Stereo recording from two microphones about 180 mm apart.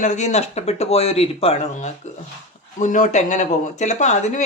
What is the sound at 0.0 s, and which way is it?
Speech, 40° left (ahead or behind).